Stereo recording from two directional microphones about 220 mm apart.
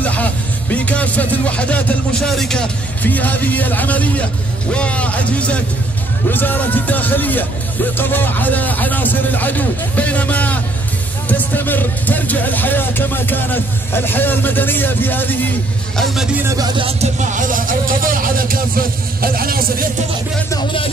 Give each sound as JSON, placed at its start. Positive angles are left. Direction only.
{"t": 0.0, "sound": "a man's voice", "side_deg": 5}
{"t": 16.0, "sound": "a man's voice", "side_deg": 0}
{"t": 16.4, "sound": "speech", "side_deg": -20}